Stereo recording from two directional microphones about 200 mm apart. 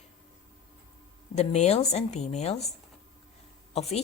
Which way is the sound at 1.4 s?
35° left (ahead or behind).